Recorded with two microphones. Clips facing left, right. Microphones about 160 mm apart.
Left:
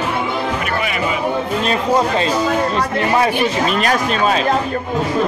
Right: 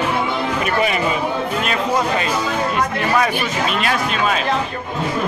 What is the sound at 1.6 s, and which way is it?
Speech, 30° left (ahead or behind).